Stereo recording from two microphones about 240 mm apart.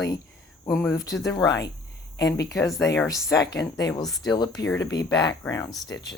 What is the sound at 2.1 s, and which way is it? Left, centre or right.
Speech, left.